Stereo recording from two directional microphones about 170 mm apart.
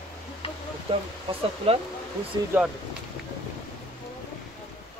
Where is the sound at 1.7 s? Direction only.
35° right (ahead or behind).